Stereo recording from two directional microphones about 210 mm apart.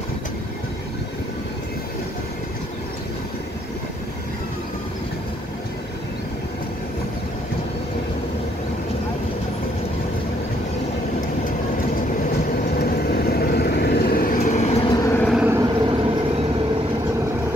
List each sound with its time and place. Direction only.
12.7 s vehicle: 45° left (ahead or behind)
14.9 s vehicle: 15° left (ahead or behind)
15.2 s vehicle: 5° right (ahead or behind)
15.6 s train: 20° right (ahead or behind)